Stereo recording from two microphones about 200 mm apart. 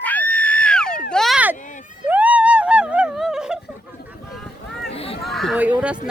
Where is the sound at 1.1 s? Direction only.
Centre (ahead or behind).